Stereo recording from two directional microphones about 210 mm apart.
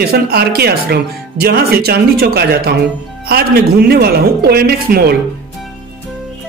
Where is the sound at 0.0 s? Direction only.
50° right (ahead or behind).